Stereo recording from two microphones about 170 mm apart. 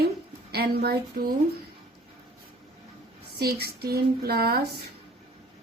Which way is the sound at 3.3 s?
70° right (ahead or behind).